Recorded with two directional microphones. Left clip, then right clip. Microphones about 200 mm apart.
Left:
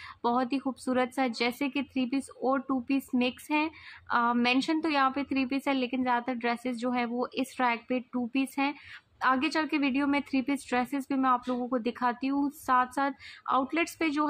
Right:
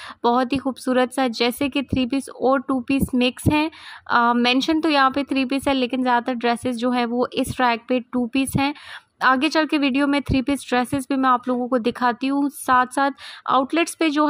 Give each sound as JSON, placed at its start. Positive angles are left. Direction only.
{"t": 0.2, "sound": "speech", "side_deg": -35}